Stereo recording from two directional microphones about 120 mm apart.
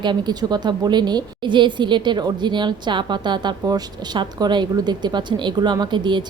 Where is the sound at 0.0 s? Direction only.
35° right (ahead or behind).